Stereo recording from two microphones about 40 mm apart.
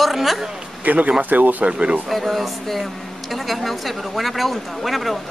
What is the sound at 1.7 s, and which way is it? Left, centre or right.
Speech, right.